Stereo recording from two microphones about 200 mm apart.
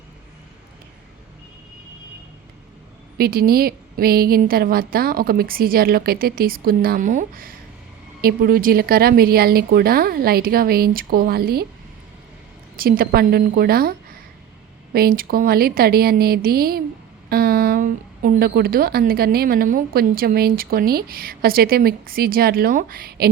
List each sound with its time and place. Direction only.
3.2 s a woman's voice: 50° right (ahead or behind)
12.7 s a woman's voice: 45° right (ahead or behind)
14.9 s a woman's voice: 45° right (ahead or behind)